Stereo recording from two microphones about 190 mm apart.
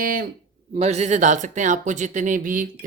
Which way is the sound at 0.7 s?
35° right (ahead or behind).